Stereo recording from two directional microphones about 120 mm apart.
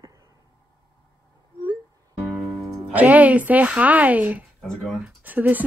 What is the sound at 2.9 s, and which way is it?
Speech, 15° right (ahead or behind).